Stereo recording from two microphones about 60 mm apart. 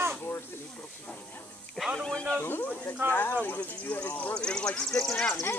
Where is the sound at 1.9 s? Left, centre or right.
Centre.